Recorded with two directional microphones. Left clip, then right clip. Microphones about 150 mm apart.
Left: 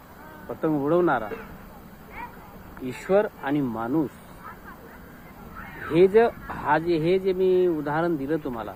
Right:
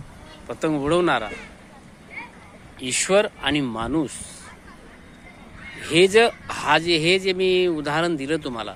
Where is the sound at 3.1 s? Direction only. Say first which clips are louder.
Right 2 dB; 55° right (ahead or behind).